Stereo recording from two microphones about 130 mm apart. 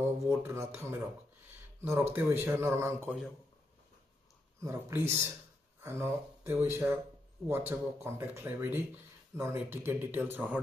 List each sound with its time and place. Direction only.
0.3 s speech: 20° right (ahead or behind)
4.6 s speech: 20° right (ahead or behind)